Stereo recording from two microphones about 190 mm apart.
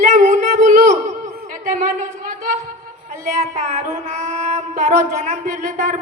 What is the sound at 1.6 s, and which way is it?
Speech, 40° right (ahead or behind).